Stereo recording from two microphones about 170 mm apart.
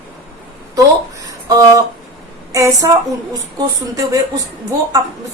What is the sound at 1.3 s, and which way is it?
A woman's voice, 20° right (ahead or behind).